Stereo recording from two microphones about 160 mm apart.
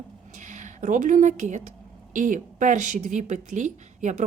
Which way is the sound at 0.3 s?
50° right (ahead or behind).